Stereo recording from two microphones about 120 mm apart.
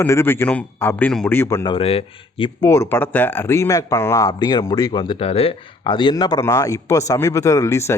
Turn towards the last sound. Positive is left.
turn(degrees=25)  # may be behind; listen again after turning